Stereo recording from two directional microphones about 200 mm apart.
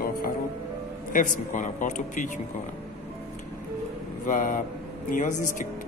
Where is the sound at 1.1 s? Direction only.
40° left (ahead or behind).